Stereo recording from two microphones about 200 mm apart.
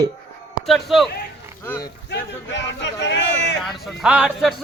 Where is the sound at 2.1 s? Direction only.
60° left (ahead or behind).